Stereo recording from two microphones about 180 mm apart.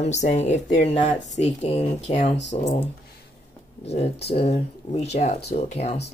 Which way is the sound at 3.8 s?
35° left (ahead or behind).